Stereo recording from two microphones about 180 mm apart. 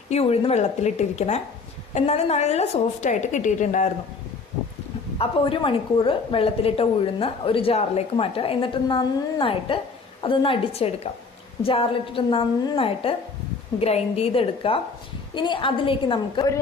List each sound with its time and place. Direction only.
0.1 s a woman's voice: 35° left (ahead or behind)
5.1 s a woman's voice: 30° left (ahead or behind)